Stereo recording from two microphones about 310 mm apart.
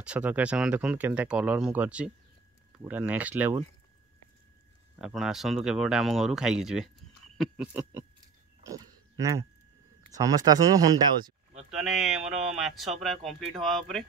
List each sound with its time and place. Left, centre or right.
0.0 s speech: centre
4.9 s speech: centre
8.6 s pig: centre
10.1 s speech: centre
11.7 s speech: centre
12.2 s speech: right
12.5 s speech: centre